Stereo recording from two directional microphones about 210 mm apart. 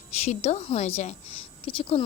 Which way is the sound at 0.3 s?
30° left (ahead or behind).